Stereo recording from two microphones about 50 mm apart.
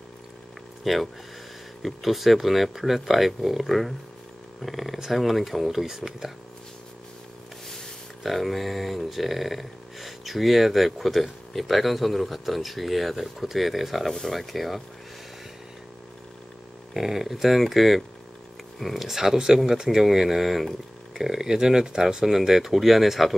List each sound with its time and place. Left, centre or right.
0.8 s speech: centre
8.2 s speech: centre
16.9 s speech: centre